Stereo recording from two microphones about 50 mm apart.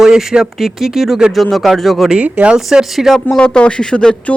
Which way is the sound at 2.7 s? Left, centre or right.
Centre.